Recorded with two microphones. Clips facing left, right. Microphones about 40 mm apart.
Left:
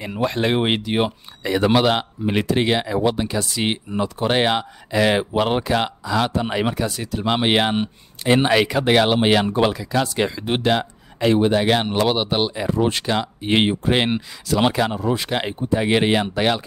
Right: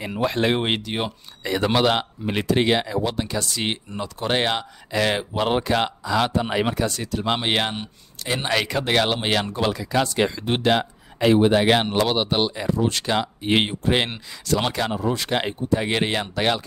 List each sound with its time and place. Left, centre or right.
0.0 s speech: centre
7.8 s speech: left
8.5 s speech: centre
9.7 s speech: centre
12.0 s speech: centre
12.6 s speech: left
13.0 s speech: centre